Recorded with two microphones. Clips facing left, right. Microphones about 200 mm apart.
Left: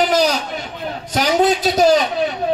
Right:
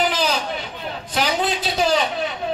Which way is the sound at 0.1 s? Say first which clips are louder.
Left 6 dB; 40° left (ahead or behind).